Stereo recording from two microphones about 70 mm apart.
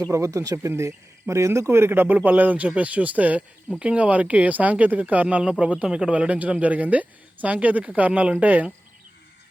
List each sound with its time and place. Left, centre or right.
0.1 s speech: right